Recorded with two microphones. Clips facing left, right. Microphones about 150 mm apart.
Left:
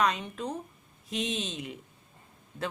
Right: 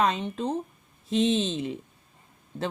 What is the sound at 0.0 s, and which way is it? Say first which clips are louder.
A woman's voice: right 3 dB; 25° right (ahead or behind).